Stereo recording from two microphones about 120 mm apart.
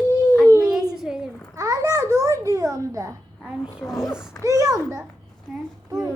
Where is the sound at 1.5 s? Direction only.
30° right (ahead or behind).